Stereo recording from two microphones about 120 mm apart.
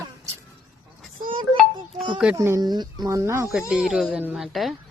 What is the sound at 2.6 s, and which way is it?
Speech, 35° right (ahead or behind).